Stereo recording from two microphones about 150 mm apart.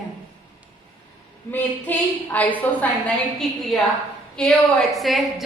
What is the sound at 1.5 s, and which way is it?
A woman's voice, 10° left (ahead or behind).